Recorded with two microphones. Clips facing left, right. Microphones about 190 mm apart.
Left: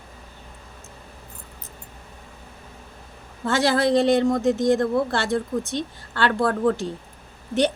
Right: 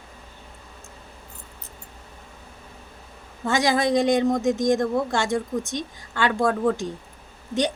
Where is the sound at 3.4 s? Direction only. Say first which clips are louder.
Left 1 dB; 15° right (ahead or behind).